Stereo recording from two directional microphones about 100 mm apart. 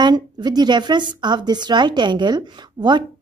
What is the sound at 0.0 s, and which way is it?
A woman's voice, 45° right (ahead or behind).